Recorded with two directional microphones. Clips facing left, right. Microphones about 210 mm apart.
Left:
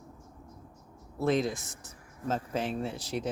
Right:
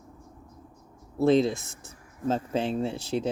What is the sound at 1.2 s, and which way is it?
Speech, 25° right (ahead or behind).